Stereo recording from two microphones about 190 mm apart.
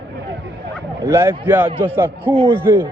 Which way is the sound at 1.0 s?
15° right (ahead or behind).